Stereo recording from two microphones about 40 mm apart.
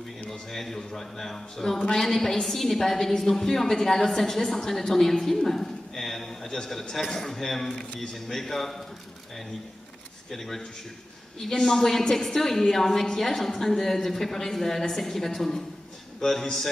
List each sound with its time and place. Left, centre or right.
0.3 s a woman's voice: centre
10.3 s a woman's voice: centre